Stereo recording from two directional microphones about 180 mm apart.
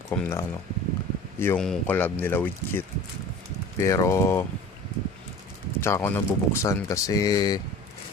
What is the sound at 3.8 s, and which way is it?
Speech, 15° left (ahead or behind).